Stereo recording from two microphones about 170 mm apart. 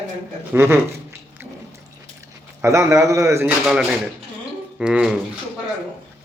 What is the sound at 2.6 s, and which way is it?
Speech, 15° right (ahead or behind).